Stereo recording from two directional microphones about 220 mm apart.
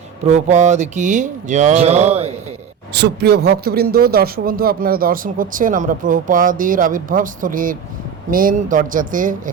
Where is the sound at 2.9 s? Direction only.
50° right (ahead or behind).